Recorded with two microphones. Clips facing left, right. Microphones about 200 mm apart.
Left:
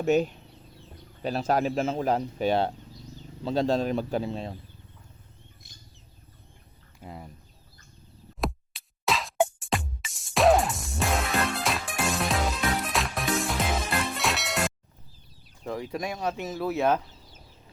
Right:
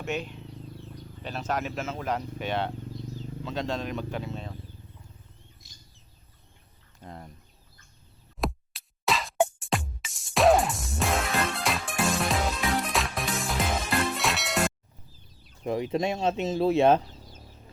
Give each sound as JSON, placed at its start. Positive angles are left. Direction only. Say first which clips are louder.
{"t": 0.0, "sound": "speech", "louder": "left 9 dB", "side_deg": 40}
{"t": 5.6, "sound": "vehicle", "louder": "left 2 dB", "side_deg": 55}
{"t": 7.0, "sound": "speech", "louder": "left 1 dB", "side_deg": 5}
{"t": 8.4, "sound": "music", "louder": "even", "side_deg": 0}
{"t": 15.6, "sound": "speech", "louder": "right 5 dB", "side_deg": -20}